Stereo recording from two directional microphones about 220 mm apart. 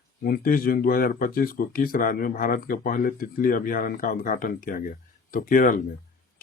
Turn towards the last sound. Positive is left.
turn(degrees=40)  # may be behind; listen again after turning